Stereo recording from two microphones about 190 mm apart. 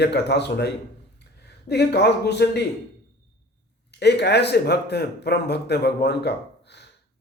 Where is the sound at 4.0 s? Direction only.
60° left (ahead or behind).